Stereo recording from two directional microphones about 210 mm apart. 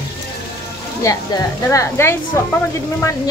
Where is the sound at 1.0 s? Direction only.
15° left (ahead or behind).